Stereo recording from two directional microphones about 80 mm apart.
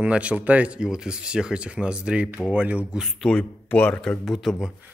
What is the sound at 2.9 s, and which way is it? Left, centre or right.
Speech, centre.